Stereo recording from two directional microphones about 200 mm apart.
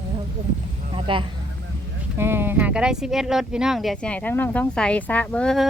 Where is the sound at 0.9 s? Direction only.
25° right (ahead or behind).